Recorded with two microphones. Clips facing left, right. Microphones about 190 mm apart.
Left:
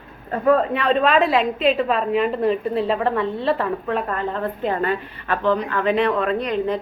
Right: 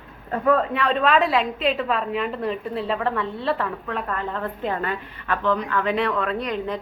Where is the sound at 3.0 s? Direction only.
25° left (ahead or behind).